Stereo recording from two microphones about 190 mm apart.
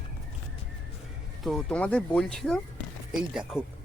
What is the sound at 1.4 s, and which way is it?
Speech, 5° left (ahead or behind).